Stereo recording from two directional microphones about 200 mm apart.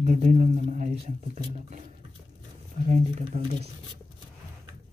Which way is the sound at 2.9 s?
35° right (ahead or behind).